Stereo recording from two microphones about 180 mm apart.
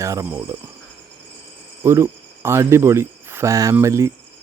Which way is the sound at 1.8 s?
15° right (ahead or behind).